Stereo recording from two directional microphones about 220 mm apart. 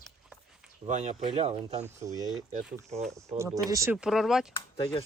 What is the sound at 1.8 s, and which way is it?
Speech, 15° right (ahead or behind).